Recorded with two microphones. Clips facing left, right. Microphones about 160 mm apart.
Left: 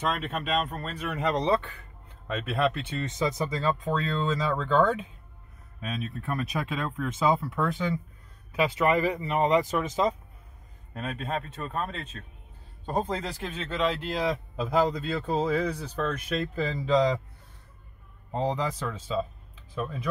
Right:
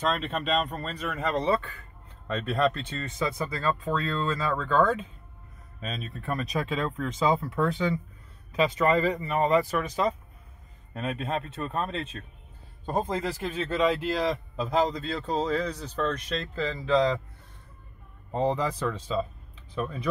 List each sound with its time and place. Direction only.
0.2 s a man's voice: 10° left (ahead or behind)
3.1 s a man's voice: 20° left (ahead or behind)
7.7 s speech: centre (ahead or behind)
8.5 s a man's voice: 10° left (ahead or behind)
11.0 s a man's voice: 5° right (ahead or behind); by 17.2 s 15° left (ahead or behind)
18.3 s speech: centre (ahead or behind)